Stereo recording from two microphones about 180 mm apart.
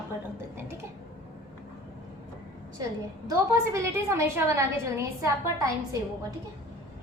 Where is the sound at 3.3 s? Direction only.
15° right (ahead or behind).